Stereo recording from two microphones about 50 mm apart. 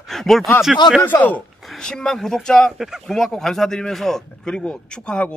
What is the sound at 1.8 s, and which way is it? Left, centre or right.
Speech, centre.